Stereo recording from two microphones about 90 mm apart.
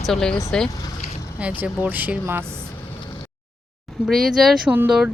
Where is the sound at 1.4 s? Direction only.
15° right (ahead or behind).